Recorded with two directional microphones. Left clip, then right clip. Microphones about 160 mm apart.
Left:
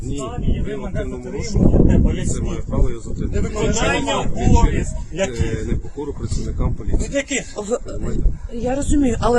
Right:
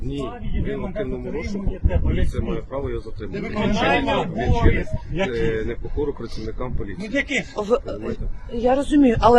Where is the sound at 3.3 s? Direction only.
45° left (ahead or behind).